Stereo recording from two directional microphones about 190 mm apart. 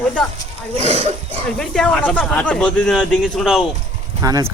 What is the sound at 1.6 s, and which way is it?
Speech, 5° left (ahead or behind).